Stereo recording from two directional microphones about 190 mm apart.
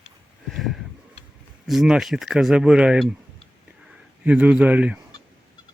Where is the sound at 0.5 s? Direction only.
Centre (ahead or behind).